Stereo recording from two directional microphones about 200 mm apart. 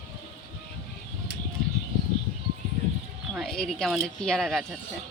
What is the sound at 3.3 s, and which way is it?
Speech, centre (ahead or behind).